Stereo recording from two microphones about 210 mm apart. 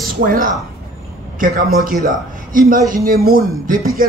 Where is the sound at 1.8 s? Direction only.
40° right (ahead or behind).